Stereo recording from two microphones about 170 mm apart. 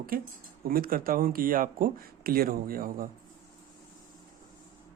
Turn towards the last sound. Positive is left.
turn(degrees=-55)  # may be behind; listen again after turning